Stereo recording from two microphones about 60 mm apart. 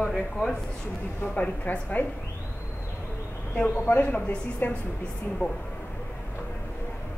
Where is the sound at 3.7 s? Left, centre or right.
Left.